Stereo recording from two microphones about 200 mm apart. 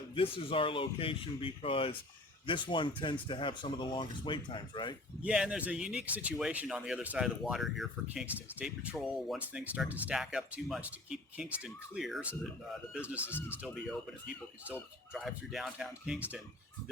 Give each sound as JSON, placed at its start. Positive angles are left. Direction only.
{"t": 0.1, "sound": "speech", "side_deg": 25}
{"t": 5.2, "sound": "speech", "side_deg": -5}
{"t": 14.3, "sound": "speech", "side_deg": -5}